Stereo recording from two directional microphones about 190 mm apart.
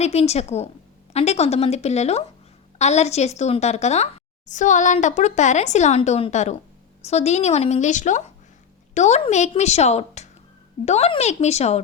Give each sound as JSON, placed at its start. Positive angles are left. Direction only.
{"t": 0.0, "sound": "a woman's voice", "side_deg": 35}